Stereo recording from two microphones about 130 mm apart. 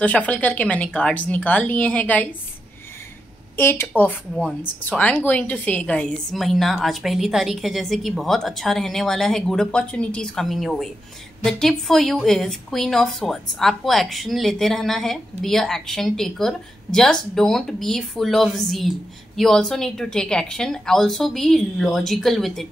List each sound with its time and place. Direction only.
0.0 s speech: 10° left (ahead or behind)
3.5 s a woman's voice: 20° left (ahead or behind); by 22.7 s centre (ahead or behind)